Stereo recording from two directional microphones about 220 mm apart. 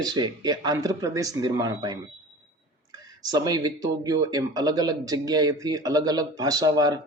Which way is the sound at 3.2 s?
15° right (ahead or behind).